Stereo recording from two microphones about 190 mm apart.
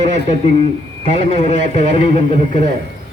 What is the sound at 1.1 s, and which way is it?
A man's voice, 35° left (ahead or behind).